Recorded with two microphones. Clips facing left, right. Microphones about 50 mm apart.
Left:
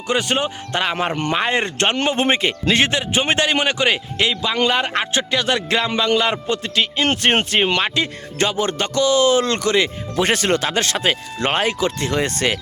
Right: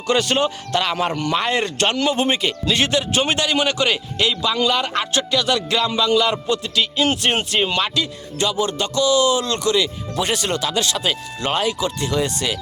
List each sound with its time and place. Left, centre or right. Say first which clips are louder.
0.1 s speech: right 2 dB; left
1.1 s speech: even; left
1.4 s speech: left 1 dB; left